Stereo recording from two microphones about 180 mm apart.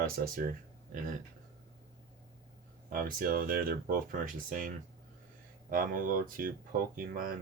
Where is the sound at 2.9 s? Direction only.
50° right (ahead or behind).